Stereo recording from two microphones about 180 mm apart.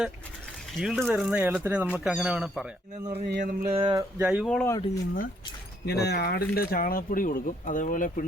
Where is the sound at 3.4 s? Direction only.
50° right (ahead or behind).